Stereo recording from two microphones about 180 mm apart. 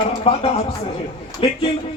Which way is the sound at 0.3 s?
35° left (ahead or behind).